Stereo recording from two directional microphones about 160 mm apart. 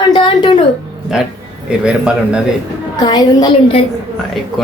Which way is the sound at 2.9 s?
25° left (ahead or behind).